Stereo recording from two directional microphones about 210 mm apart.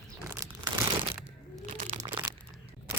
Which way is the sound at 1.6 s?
35° right (ahead or behind).